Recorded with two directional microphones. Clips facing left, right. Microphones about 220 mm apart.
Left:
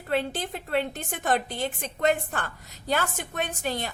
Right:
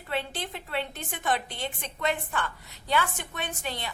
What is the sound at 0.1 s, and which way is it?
A woman's voice, 45° left (ahead or behind).